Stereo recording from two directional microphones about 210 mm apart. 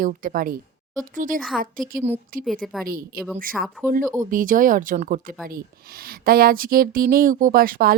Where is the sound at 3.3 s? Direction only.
40° right (ahead or behind).